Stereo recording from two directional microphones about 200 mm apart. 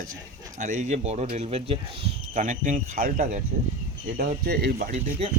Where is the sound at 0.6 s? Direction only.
35° right (ahead or behind).